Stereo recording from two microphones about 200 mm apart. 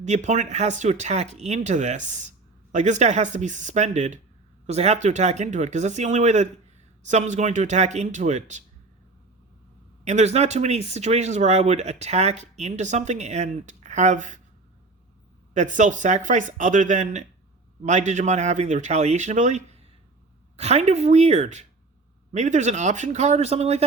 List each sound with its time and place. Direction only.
0.0 s speech: 35° right (ahead or behind)
10.0 s speech: 35° right (ahead or behind)
15.5 s speech: 35° right (ahead or behind)